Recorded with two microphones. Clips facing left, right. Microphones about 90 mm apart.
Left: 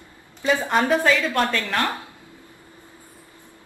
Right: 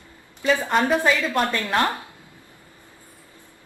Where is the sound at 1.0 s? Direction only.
10° right (ahead or behind).